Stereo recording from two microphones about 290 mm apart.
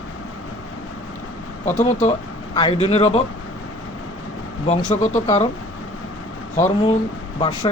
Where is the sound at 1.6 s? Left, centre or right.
Left.